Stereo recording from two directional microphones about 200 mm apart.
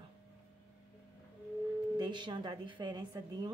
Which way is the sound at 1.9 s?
20° right (ahead or behind).